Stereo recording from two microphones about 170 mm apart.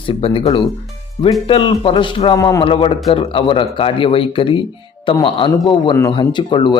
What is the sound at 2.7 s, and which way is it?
Speech, 30° left (ahead or behind).